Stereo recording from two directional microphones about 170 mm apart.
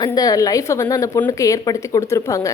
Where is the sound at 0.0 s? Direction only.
20° left (ahead or behind).